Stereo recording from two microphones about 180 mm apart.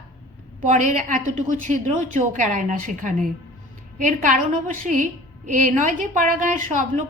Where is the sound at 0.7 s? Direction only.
45° right (ahead or behind).